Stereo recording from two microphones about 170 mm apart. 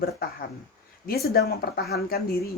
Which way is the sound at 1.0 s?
60° left (ahead or behind).